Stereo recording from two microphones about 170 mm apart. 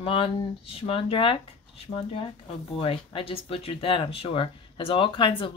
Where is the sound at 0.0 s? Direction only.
30° left (ahead or behind).